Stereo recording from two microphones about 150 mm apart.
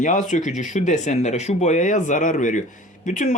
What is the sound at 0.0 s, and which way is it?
Speech, 55° left (ahead or behind).